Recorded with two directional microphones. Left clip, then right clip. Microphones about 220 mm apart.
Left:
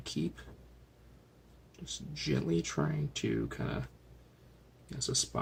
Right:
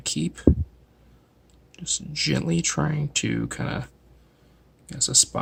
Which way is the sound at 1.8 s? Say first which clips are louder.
Right 12 dB; 50° right (ahead or behind).